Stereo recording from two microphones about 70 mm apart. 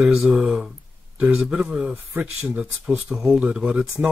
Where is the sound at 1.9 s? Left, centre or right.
Right.